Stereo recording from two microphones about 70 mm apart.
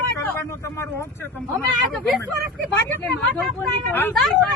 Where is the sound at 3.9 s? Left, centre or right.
Left.